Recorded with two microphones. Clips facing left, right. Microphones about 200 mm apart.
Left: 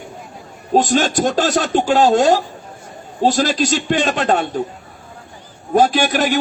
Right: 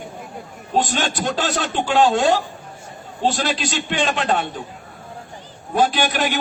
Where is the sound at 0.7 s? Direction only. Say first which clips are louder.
Left 6 dB; 45° left (ahead or behind).